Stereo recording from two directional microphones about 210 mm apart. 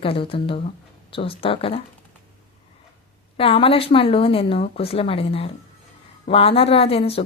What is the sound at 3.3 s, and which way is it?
Speech, 25° left (ahead or behind).